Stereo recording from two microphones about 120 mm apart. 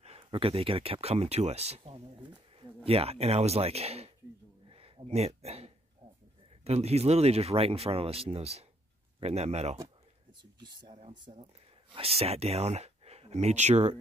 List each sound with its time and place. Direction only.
0.0 s speech: 55° right (ahead or behind)
4.6 s a sound: 50° right (ahead or behind)
6.6 s speech: 60° right (ahead or behind)
10.9 s speech: 60° right (ahead or behind)